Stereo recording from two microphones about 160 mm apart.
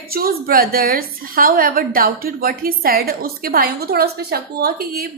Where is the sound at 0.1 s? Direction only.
70° right (ahead or behind).